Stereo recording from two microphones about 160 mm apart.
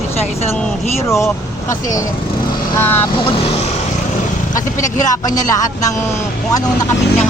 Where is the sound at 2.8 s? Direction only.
10° left (ahead or behind).